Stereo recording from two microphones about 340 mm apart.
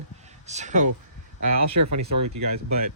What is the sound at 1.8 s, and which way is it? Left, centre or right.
Speech, right.